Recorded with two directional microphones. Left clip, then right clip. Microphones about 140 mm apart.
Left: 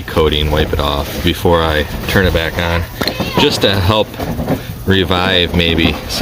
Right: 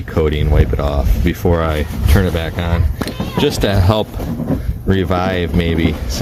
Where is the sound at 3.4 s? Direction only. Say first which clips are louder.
Left 3 dB; 50° right (ahead or behind).